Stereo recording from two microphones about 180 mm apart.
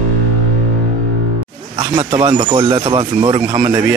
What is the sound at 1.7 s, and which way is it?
Speech, 30° right (ahead or behind).